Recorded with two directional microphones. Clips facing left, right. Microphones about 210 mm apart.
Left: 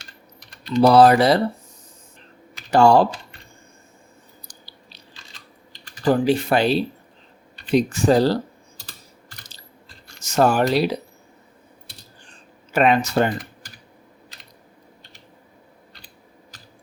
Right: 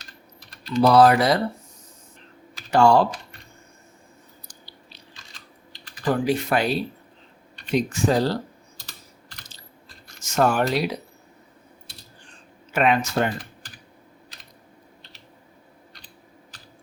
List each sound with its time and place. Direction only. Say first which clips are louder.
0.7 s speech: left 3 dB; 30° left (ahead or behind)
2.7 s speech: left 3 dB; 35° left (ahead or behind)
4.4 s chewing: even; 35° left (ahead or behind)
6.1 s speech: left 4 dB; 30° left (ahead or behind)
10.3 s speech: left 3 dB; 35° left (ahead or behind)
12.7 s speech: left 3 dB; 35° left (ahead or behind)